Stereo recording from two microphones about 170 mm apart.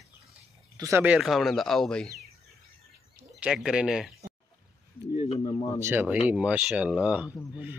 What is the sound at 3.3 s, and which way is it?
Speech, 5° right (ahead or behind).